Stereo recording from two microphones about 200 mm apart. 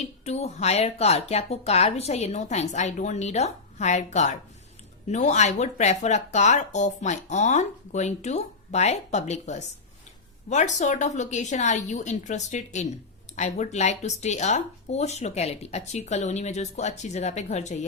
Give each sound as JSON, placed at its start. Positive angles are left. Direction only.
{"t": 0.0, "sound": "speech", "side_deg": 30}